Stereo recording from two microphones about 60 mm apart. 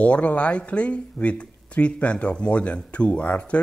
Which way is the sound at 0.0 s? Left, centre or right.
Left.